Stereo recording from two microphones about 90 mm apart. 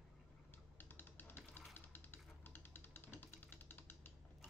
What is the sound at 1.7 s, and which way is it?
Typewriter, 25° left (ahead or behind).